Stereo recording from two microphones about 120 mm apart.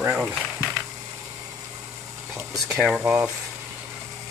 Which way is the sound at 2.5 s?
Centre (ahead or behind).